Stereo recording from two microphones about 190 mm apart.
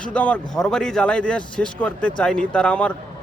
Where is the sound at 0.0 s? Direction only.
5° left (ahead or behind).